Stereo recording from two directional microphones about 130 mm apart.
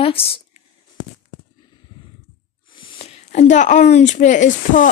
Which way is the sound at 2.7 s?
50° left (ahead or behind).